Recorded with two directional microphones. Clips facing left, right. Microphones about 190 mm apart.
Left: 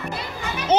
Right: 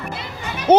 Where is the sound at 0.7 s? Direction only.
60° right (ahead or behind).